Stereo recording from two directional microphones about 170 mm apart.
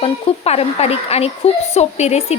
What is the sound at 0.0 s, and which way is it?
A woman's voice, 35° left (ahead or behind).